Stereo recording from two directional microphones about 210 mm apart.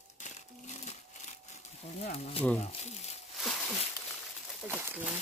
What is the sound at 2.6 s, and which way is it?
Crumpling, 30° left (ahead or behind).